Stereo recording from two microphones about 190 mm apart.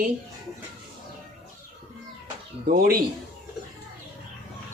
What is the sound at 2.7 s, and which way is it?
Speech, 50° right (ahead or behind).